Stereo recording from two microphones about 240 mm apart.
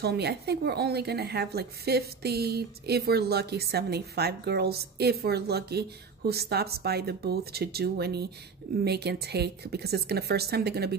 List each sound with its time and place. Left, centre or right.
0.0 s a woman's voice: right